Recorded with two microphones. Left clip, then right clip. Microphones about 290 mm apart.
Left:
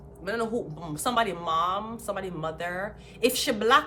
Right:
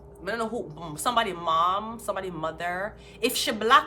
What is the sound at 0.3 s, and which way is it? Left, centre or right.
Speech, centre.